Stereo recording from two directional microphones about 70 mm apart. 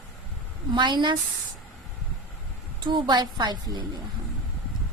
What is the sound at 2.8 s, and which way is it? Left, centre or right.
A woman's voice, right.